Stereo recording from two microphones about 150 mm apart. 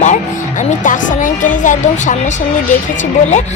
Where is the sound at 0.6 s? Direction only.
55° left (ahead or behind).